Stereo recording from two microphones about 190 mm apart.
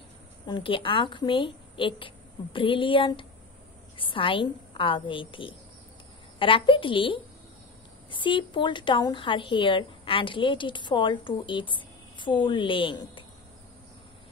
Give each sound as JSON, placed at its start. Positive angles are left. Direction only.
{"t": 0.5, "sound": "speech", "side_deg": 25}